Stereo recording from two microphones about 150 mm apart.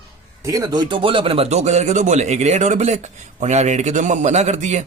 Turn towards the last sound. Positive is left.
turn(degrees=-50)  # may be behind; listen again after turning